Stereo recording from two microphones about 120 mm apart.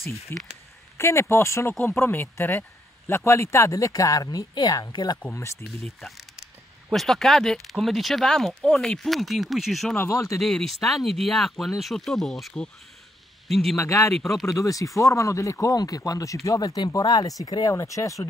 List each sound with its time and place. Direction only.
0.3 s speech: 15° left (ahead or behind); by 5.2 s 35° left (ahead or behind)
5.9 s speech: centre (ahead or behind)
9.9 s speech: 25° left (ahead or behind)
10.4 s a man's voice: centre (ahead or behind)
13.7 s speech: 25° left (ahead or behind)
14.1 s speech: centre (ahead or behind)
14.4 s speech: 25° left (ahead or behind)